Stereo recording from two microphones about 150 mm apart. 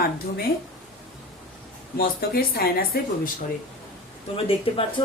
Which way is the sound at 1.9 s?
80° left.